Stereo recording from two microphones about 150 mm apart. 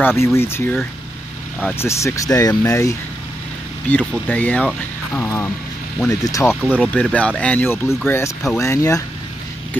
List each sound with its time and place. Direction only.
0.0 s speech: 15° left (ahead or behind)
6.5 s speech: 5° right (ahead or behind)
6.8 s speech: 10° left (ahead or behind)